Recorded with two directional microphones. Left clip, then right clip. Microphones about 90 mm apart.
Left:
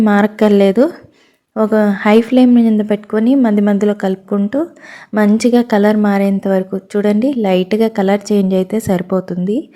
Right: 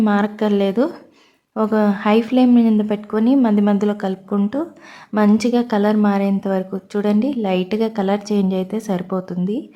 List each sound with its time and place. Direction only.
0.0 s a woman's voice: 55° left (ahead or behind); by 4.4 s 35° left (ahead or behind)
5.4 s a woman's voice: 40° left (ahead or behind)